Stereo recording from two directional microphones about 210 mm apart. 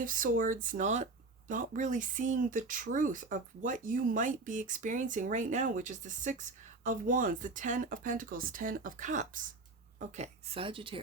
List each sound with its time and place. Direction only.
0.0 s speech: 40° right (ahead or behind)
10.2 s speech: 25° right (ahead or behind)